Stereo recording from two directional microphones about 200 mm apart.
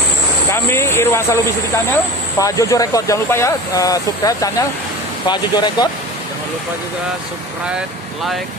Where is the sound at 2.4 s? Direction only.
15° left (ahead or behind).